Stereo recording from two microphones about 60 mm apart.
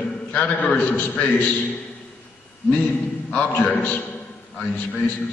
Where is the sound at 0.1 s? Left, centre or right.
Left.